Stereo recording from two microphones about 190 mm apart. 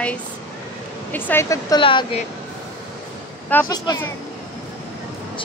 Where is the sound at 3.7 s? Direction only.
20° left (ahead or behind).